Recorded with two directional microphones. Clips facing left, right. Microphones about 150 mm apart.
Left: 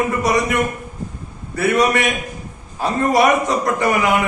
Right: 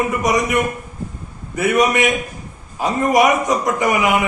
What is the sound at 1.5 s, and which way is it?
A man's voice, 15° right (ahead or behind).